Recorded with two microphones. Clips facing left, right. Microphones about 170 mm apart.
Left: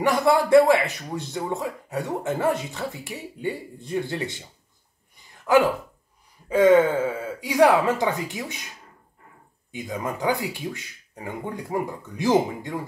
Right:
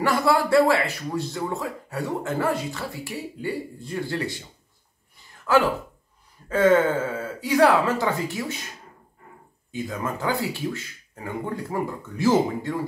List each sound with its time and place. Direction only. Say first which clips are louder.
0.0 s speech: left 1 dB; 20° left (ahead or behind)
5.4 s speech: left 2 dB; 20° left (ahead or behind)
9.7 s speech: right 1 dB; 15° left (ahead or behind)